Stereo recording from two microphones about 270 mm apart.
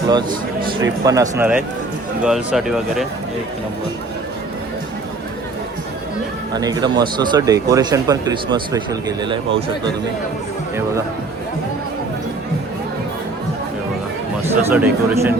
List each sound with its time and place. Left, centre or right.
0.1 s speech: centre
6.5 s speech: centre
14.7 s speech: centre